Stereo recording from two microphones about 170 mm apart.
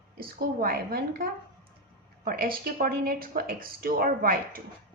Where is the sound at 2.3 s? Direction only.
60° right (ahead or behind).